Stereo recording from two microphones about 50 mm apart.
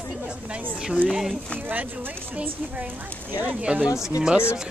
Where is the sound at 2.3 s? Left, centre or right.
Right.